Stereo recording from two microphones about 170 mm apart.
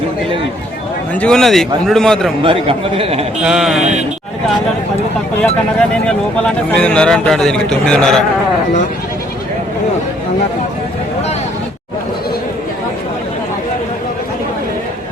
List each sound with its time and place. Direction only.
1.1 s a man's voice: 5° left (ahead or behind)
2.4 s speech: 30° right (ahead or behind)
3.4 s a man's voice: 5° right (ahead or behind)
6.1 s a man's voice: 5° left (ahead or behind)